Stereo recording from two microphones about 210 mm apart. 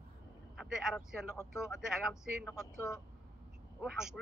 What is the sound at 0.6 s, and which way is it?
A man's voice, 5° right (ahead or behind).